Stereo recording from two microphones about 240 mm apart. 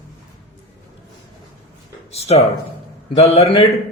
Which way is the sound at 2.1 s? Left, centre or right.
Left.